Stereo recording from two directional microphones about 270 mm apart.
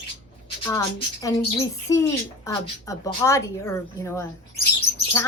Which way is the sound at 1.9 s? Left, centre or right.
Centre.